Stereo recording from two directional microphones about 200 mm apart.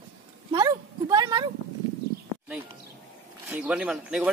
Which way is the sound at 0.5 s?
20° right (ahead or behind).